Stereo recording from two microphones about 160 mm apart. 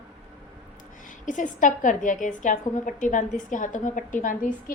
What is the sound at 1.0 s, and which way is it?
A woman's voice, 50° left (ahead or behind).